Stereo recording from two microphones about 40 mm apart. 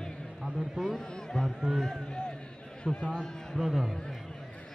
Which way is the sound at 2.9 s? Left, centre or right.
Centre.